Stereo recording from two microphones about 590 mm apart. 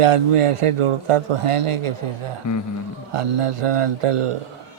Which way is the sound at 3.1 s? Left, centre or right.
Right.